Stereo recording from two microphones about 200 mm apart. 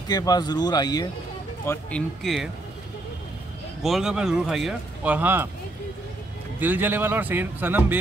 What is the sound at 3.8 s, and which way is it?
Speech, centre (ahead or behind).